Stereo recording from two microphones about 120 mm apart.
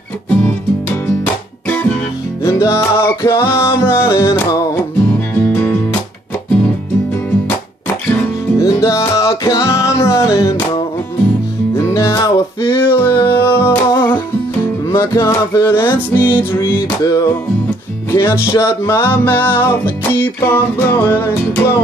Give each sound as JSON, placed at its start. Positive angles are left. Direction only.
{"t": 0.3, "sound": "music", "side_deg": 15}
{"t": 8.5, "sound": "music", "side_deg": 25}
{"t": 11.7, "sound": "music", "side_deg": 25}
{"t": 17.0, "sound": "music", "side_deg": 30}
{"t": 18.5, "sound": "music", "side_deg": 20}